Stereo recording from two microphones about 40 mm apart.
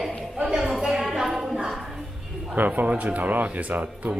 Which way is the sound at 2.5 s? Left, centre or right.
Right.